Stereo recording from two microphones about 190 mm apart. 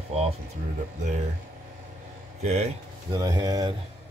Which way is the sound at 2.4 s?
35° right (ahead or behind).